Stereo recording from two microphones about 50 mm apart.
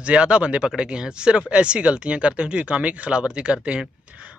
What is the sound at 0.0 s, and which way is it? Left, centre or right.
Speech, right.